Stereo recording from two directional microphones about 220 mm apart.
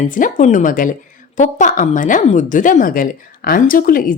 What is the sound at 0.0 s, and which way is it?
Speech, 35° left (ahead or behind).